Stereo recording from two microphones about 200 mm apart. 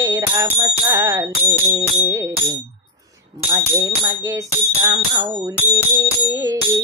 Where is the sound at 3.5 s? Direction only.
15° right (ahead or behind).